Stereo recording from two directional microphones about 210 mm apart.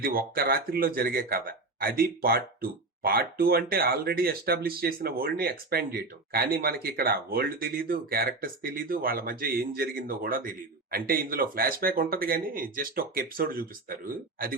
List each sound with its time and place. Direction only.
0.0 s speech: 45° right (ahead or behind)